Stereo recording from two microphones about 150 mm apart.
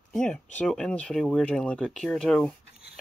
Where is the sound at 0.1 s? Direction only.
5° left (ahead or behind).